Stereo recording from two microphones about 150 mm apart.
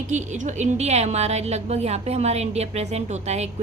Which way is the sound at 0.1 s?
55° right (ahead or behind).